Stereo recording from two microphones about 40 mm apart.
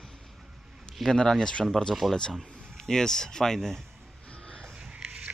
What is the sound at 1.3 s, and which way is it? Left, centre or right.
Speech, centre.